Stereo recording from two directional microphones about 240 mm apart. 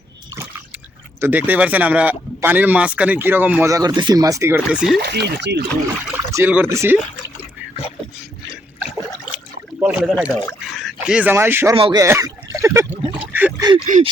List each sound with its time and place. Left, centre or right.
1.2 s speech: centre
4.9 s speech: right
6.1 s speech: centre
9.8 s speech: centre
11.8 s a sound: centre
13.8 s gasp: right